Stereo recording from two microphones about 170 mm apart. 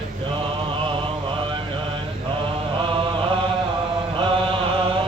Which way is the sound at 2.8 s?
30° right (ahead or behind).